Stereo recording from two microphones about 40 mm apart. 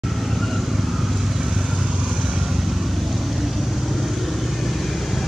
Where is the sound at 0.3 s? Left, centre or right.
Centre.